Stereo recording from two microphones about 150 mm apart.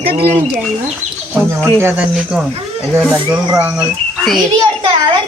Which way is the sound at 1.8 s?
15° right (ahead or behind).